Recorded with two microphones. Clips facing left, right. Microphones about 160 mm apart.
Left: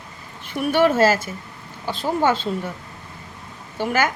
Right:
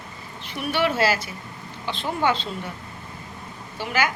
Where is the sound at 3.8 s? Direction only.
50° left (ahead or behind).